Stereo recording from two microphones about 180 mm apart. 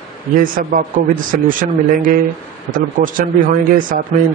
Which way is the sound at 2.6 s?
50° right (ahead or behind).